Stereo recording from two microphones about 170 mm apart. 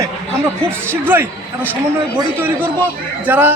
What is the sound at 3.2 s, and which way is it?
Speech, 10° right (ahead or behind).